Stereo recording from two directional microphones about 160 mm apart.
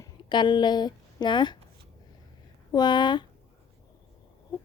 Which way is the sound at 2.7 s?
30° left (ahead or behind).